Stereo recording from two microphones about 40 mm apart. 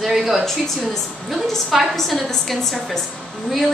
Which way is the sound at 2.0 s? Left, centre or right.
Centre.